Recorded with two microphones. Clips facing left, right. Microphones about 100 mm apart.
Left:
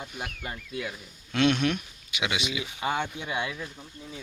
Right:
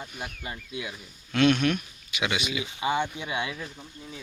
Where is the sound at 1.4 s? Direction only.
25° left (ahead or behind).